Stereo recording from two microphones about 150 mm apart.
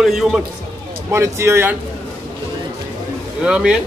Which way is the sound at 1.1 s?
20° right (ahead or behind).